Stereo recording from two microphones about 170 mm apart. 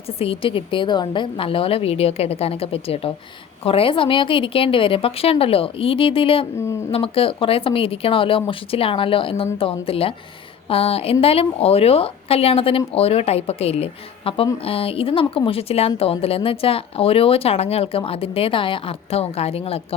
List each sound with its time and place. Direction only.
0.2 s speech: 30° left (ahead or behind)